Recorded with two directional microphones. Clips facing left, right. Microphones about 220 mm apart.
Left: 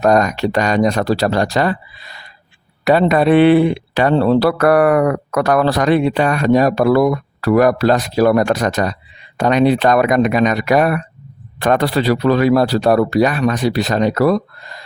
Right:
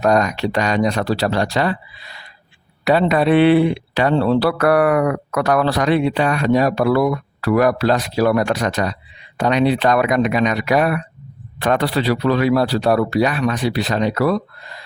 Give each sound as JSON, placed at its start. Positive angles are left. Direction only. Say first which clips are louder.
{"t": 0.0, "sound": "speech", "louder": "left 3 dB", "side_deg": 45}